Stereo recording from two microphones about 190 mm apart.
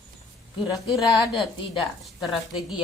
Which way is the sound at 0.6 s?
Centre (ahead or behind).